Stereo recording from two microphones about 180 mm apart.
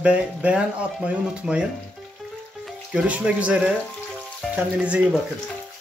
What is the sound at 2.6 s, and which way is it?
Speech, 5° right (ahead or behind).